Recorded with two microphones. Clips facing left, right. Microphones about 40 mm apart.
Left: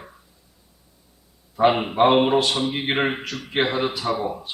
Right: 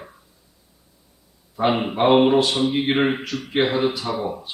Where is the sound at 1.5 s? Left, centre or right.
Centre.